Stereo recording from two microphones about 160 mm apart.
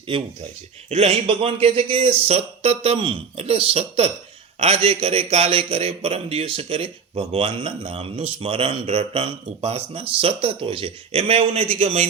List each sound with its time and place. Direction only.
0.1 s speech: 30° right (ahead or behind)